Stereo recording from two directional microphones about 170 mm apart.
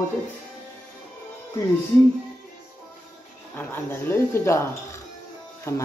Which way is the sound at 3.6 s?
10° left (ahead or behind).